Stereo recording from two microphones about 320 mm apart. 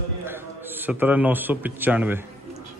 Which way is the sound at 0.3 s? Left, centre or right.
Centre.